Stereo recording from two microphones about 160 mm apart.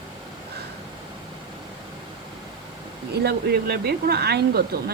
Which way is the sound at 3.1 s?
90° right.